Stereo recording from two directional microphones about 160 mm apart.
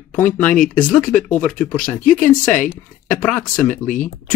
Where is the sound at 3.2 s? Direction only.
10° left (ahead or behind).